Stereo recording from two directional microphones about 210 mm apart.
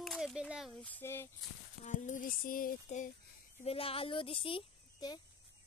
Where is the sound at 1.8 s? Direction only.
35° left (ahead or behind).